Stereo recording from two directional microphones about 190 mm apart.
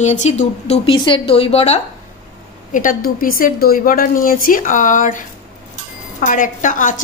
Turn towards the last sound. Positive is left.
turn(degrees=45)  # may be behind; listen again after turning